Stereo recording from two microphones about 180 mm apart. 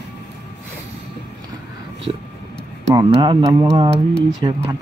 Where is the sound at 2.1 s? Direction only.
30° right (ahead or behind).